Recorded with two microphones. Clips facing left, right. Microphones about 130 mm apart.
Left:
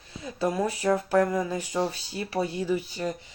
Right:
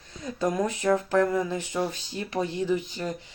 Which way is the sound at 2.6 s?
10° left (ahead or behind).